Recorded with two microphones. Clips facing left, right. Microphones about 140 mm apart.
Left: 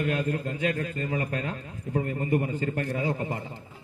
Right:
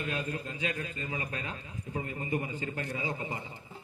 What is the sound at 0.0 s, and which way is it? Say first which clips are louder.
Speech: left 8 dB; 55° left (ahead or behind).